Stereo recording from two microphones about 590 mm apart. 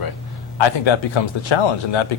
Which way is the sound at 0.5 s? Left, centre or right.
Left.